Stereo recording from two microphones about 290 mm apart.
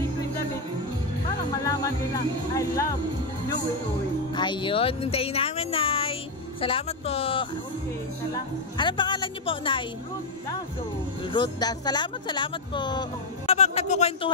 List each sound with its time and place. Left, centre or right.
1.6 s speech: centre
4.4 s speech: centre
8.7 s speech: centre
11.3 s speech: centre